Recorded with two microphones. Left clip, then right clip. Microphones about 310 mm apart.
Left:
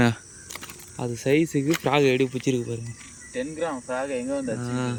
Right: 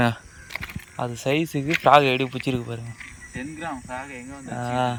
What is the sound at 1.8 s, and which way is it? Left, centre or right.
Speech, centre.